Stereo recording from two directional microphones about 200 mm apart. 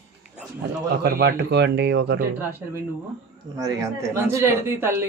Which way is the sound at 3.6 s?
15° right (ahead or behind).